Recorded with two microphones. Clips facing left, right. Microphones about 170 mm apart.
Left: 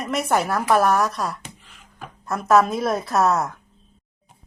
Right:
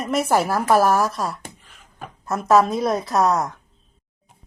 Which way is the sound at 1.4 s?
50° right (ahead or behind).